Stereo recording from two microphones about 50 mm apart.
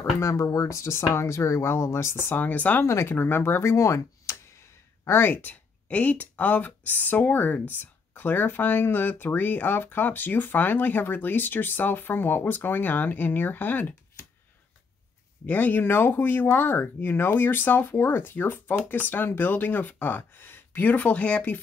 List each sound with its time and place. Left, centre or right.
0.2 s speech: left
2.3 s speech: left
2.8 s speech: left
3.1 s speech: left
3.7 s speech: left
5.0 s speech: left
5.3 s speech: left
15.4 s speech: left
15.8 s speech: left